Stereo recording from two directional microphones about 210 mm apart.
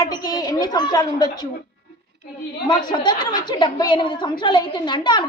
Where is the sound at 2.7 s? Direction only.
20° left (ahead or behind).